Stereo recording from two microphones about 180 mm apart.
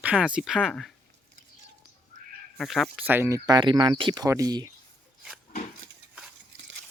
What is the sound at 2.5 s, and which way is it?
Speech, centre (ahead or behind).